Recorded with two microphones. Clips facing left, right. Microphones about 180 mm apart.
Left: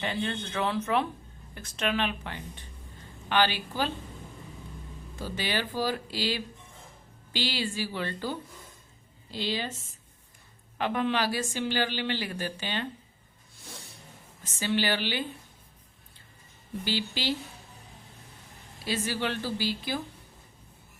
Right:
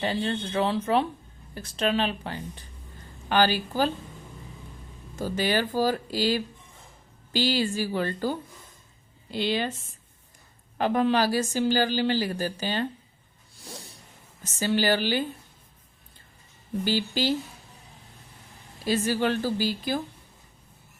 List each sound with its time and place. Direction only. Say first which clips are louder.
0.0 s speech: right 4 dB; 35° right (ahead or behind)
5.1 s speech: right 6 dB; 45° right (ahead or behind)
9.3 s a woman's voice: right 5 dB; 60° right (ahead or behind)
10.8 s speech: right 5 dB; 40° right (ahead or behind)
14.4 s speech: right 4 dB; 40° right (ahead or behind)
16.8 s speech: right 5 dB; 45° right (ahead or behind)
18.9 s speech: right 6 dB; 45° right (ahead or behind)